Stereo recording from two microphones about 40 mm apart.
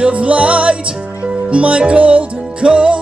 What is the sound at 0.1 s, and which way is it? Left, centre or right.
Music, right.